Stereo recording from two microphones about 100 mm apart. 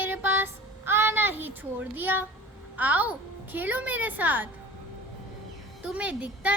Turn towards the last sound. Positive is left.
turn(degrees=-15)  # may be behind; listen again after turning